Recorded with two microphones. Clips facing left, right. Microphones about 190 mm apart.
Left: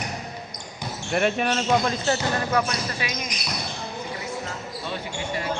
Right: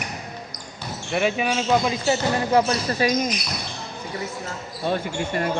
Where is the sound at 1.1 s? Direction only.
Centre (ahead or behind).